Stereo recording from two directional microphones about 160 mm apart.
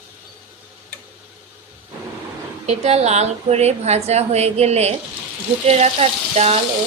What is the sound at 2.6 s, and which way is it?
A woman's voice, 40° right (ahead or behind).